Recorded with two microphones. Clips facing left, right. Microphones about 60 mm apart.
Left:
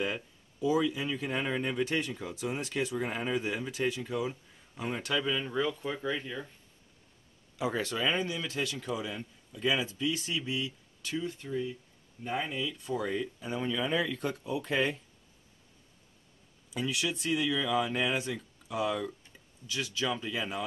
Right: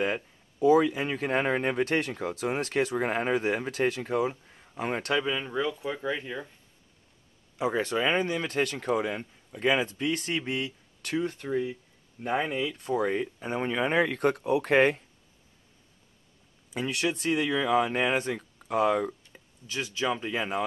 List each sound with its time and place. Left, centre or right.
0.0 s a sound: right
0.7 s speech: right
5.2 s speech: right
5.5 s speech: centre
7.5 s speech: right
16.7 s speech: right
19.6 s speech: right